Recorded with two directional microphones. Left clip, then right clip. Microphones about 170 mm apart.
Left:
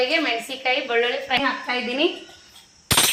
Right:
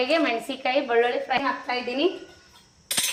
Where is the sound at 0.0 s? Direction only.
40° right (ahead or behind).